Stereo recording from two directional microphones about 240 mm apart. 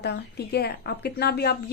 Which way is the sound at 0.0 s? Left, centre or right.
Left.